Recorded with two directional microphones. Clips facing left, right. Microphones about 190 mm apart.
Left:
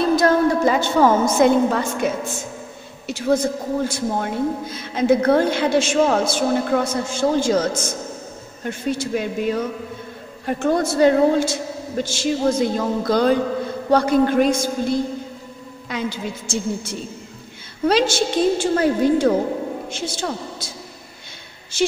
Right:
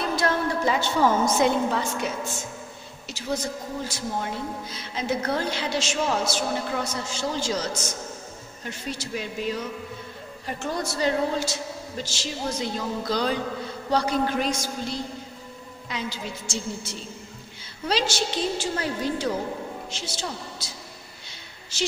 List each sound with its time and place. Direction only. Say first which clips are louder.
0.0 s a woman's voice: left 9 dB; 40° left (ahead or behind)